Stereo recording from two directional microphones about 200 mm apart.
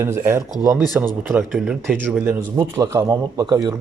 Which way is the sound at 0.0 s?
10° right (ahead or behind).